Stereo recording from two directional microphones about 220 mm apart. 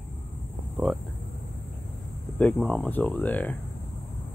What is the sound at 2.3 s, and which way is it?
Speech, 5° left (ahead or behind).